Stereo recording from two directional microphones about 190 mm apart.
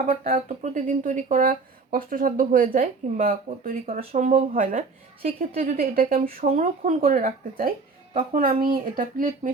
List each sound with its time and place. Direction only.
0.3 s speech: 35° right (ahead or behind)
5.5 s speech: 50° right (ahead or behind)
6.3 s speech: 40° right (ahead or behind)
8.3 s speech: 50° right (ahead or behind)